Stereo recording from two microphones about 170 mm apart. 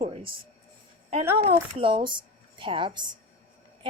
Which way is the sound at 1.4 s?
30° right (ahead or behind).